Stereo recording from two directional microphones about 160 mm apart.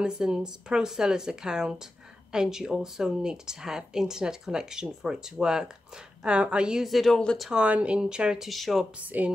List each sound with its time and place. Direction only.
0.0 s speech: 5° right (ahead or behind)